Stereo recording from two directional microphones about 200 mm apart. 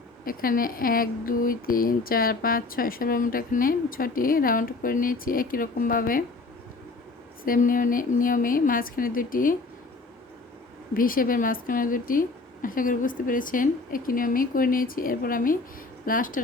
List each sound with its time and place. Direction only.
0.3 s speech: 45° left (ahead or behind)
7.4 s speech: 45° left (ahead or behind)
10.9 s speech: 45° left (ahead or behind)